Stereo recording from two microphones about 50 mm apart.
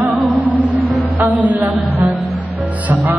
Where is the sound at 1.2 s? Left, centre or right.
Right.